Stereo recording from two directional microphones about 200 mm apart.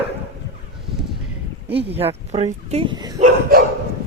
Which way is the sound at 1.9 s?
30° right (ahead or behind).